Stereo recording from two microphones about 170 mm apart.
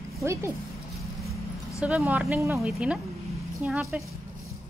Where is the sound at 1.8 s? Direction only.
5° right (ahead or behind).